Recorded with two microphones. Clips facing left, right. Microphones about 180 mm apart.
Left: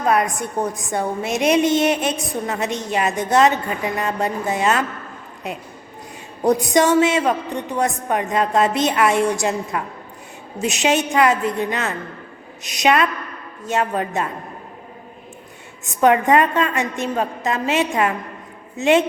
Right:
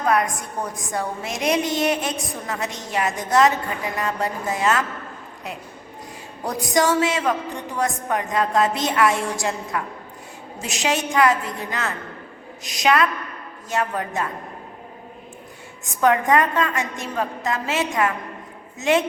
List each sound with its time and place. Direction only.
0.0 s a woman's voice: 25° left (ahead or behind)
6.4 s a woman's voice: 20° left (ahead or behind)
16.0 s a woman's voice: 20° left (ahead or behind)